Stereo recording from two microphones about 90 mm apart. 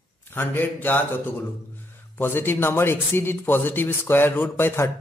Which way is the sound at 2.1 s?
25° left (ahead or behind).